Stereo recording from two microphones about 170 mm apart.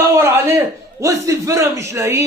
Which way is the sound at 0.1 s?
15° right (ahead or behind).